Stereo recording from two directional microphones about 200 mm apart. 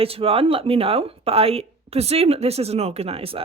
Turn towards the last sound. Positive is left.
turn(degrees=-30)  # may be behind; listen again after turning